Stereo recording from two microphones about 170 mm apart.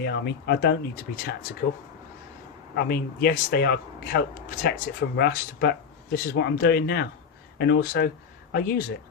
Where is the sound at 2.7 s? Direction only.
70° left (ahead or behind).